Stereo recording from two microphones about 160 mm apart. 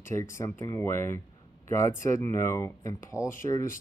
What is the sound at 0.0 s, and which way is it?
Speech, 15° left (ahead or behind).